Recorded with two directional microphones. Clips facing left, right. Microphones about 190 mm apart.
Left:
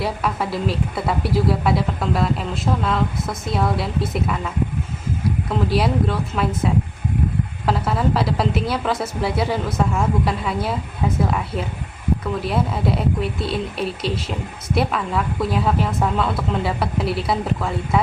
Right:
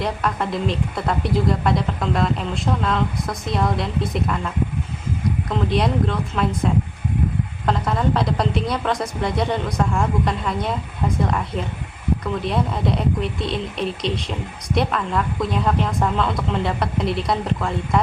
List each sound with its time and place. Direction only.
0.0 s a woman's voice: 5° left (ahead or behind)